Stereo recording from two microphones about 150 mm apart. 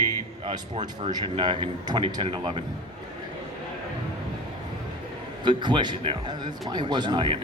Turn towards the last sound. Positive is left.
turn(degrees=-30)  # may be behind; listen again after turning